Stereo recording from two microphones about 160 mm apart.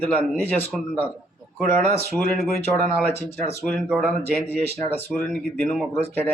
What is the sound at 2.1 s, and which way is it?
Speech, 5° left (ahead or behind).